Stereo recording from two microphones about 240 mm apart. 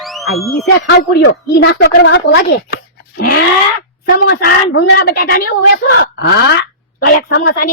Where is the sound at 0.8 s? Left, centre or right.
Left.